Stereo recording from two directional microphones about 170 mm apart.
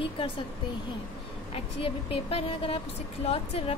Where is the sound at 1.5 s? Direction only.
35° left (ahead or behind).